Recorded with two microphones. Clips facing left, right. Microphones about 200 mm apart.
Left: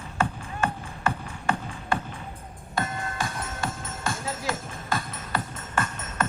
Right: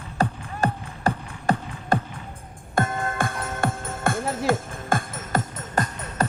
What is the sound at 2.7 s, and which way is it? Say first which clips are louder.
Music: right 5 dB; 50° right (ahead or behind).